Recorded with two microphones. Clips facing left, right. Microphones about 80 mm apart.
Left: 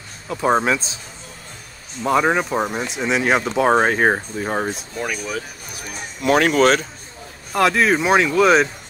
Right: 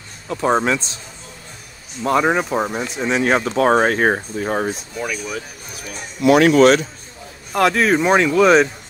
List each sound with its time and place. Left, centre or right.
0.3 s speech: centre
2.0 s speech: centre
6.2 s a man's voice: left
7.5 s speech: centre